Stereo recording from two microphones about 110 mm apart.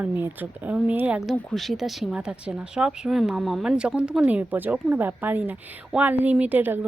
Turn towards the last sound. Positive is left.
turn(degrees=-15)  # may be behind; listen again after turning